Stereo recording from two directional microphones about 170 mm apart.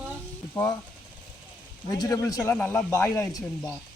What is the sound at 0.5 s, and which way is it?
Speech, 20° left (ahead or behind).